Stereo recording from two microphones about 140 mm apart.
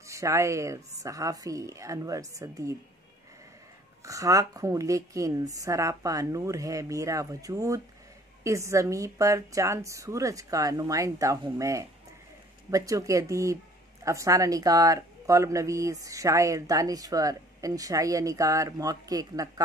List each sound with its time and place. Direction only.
0.0 s a woman's voice: 20° right (ahead or behind)
4.0 s a woman's voice: 25° right (ahead or behind)